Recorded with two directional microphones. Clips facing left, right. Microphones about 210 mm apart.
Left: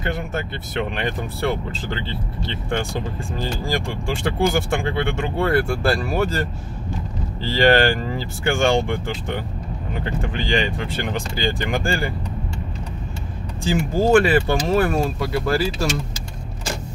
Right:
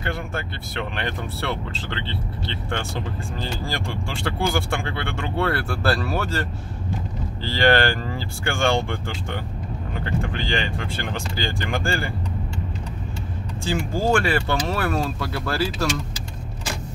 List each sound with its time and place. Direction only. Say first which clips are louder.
0.0 s speech: left 3 dB; 20° left (ahead or behind)
7.4 s speech: left 3 dB; 15° left (ahead or behind)
13.7 s speech: left 4 dB; 15° left (ahead or behind)